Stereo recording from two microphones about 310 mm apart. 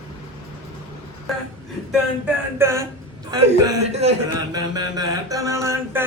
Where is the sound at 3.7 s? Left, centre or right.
Centre.